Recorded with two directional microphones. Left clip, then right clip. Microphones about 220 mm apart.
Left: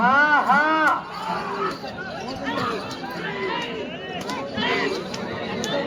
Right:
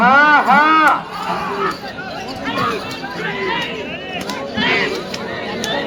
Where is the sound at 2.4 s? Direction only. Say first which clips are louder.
Right 7 dB; centre (ahead or behind).